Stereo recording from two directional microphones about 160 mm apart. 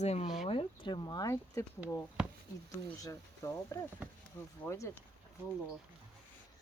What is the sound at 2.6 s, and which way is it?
Speech, 20° left (ahead or behind).